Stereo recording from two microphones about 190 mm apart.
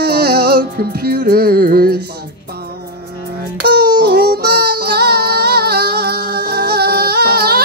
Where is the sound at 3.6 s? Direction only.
60° right (ahead or behind).